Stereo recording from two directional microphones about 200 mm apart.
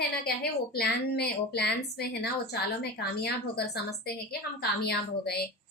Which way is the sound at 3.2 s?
55° left (ahead or behind).